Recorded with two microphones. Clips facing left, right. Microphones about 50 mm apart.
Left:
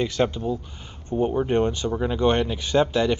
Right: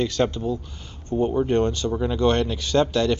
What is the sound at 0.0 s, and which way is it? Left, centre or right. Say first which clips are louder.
Speech: right 1 dB; centre.